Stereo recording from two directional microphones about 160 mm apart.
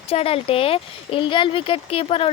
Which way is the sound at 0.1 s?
40° left (ahead or behind).